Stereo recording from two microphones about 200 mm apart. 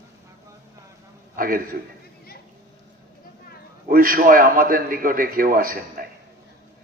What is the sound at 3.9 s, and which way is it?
A man's voice, 45° right (ahead or behind).